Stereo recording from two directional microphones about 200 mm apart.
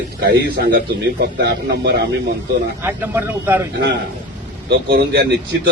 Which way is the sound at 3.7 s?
60° right (ahead or behind).